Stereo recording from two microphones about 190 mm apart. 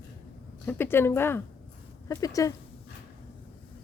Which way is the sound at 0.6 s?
10° left (ahead or behind).